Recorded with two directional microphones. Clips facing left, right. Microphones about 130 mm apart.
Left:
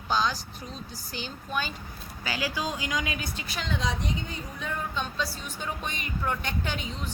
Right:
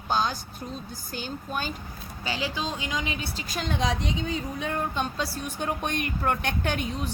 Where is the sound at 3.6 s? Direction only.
50° right (ahead or behind).